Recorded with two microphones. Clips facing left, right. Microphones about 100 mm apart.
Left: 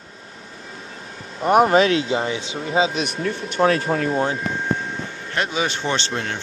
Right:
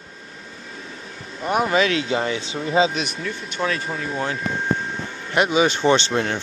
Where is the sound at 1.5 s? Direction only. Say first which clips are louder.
Left 5 dB; 50° left (ahead or behind); by 2.1 s 30° left (ahead or behind).